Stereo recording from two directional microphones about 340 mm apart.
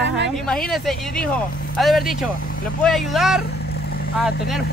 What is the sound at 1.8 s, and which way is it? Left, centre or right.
Speech, centre.